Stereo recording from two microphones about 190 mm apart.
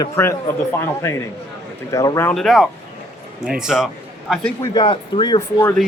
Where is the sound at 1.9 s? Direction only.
15° left (ahead or behind).